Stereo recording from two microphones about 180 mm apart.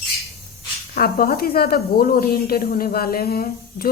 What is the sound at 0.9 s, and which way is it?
Speech, 55° left (ahead or behind).